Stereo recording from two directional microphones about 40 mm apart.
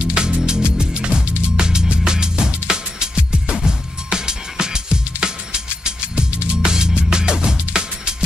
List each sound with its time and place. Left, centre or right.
0.0 s music: right